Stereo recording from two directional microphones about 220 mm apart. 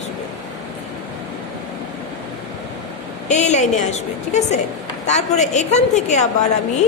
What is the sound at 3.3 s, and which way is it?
A woman's voice, 30° left (ahead or behind).